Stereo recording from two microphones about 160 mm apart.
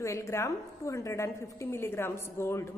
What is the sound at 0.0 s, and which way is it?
A woman's voice, 20° left (ahead or behind).